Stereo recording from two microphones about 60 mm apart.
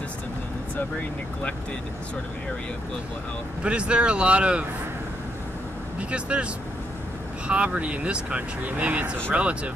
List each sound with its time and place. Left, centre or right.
0.7 s speech: left
3.6 s speech: centre
5.9 s speech: right